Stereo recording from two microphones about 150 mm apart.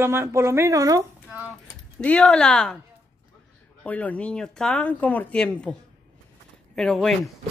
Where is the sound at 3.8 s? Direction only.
10° left (ahead or behind).